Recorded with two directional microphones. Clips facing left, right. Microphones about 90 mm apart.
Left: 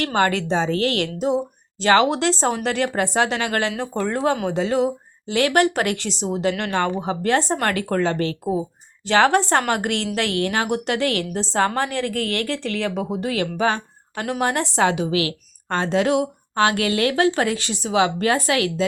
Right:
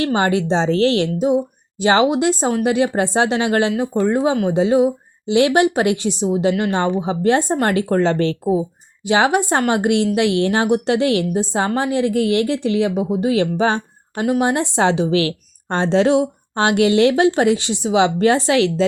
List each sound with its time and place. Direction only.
0.0 s a woman's voice: 20° right (ahead or behind); by 8.4 s 35° right (ahead or behind)
9.0 s a woman's voice: 15° right (ahead or behind)
14.3 s a woman's voice: 15° right (ahead or behind)